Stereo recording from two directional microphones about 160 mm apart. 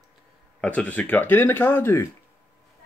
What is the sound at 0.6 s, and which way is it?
Speech, 10° left (ahead or behind).